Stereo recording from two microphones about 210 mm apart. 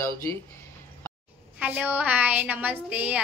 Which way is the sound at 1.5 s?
5° right (ahead or behind).